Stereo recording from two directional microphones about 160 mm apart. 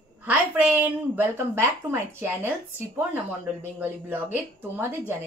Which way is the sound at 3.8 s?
10° right (ahead or behind).